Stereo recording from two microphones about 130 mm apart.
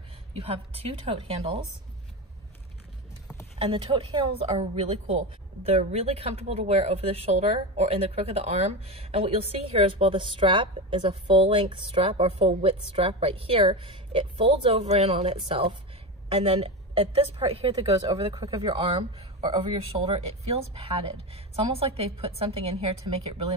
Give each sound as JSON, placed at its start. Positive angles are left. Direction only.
{"t": 0.4, "sound": "a woman's voice", "side_deg": -50}
{"t": 3.5, "sound": "a woman's voice", "side_deg": -40}
{"t": 18.0, "sound": "speech", "side_deg": -30}
{"t": 18.9, "sound": "a woman's voice", "side_deg": -45}
{"t": 21.7, "sound": "a woman's voice", "side_deg": -50}